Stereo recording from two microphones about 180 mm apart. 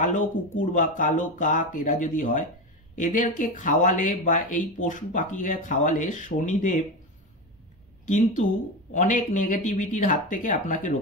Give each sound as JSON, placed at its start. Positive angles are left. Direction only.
{"t": 0.0, "sound": "speech", "side_deg": 45}
{"t": 8.1, "sound": "speech", "side_deg": 45}